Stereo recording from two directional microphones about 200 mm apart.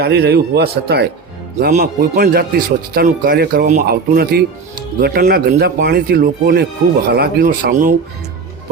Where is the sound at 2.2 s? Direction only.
50° right (ahead or behind).